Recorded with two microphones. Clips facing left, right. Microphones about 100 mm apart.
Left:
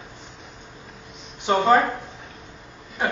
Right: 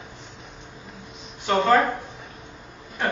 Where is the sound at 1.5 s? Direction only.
20° left (ahead or behind).